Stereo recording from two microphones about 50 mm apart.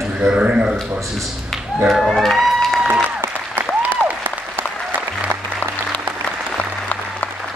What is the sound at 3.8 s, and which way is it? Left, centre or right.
Applause, right.